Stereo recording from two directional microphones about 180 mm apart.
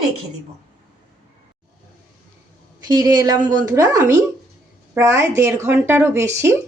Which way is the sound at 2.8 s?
20° right (ahead or behind).